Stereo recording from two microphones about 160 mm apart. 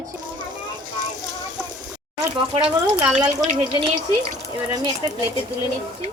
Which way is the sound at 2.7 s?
10° right (ahead or behind).